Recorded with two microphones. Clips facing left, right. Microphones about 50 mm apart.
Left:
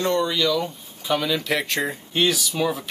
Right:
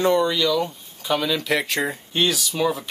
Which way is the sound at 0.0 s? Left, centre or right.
Centre.